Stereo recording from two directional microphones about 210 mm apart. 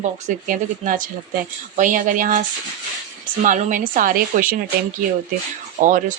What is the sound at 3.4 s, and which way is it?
Speech, 35° right (ahead or behind).